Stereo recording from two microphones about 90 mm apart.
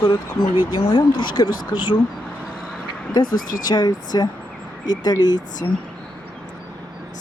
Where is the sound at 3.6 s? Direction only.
55° left (ahead or behind).